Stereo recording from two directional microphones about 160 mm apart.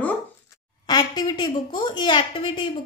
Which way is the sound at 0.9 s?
25° left (ahead or behind).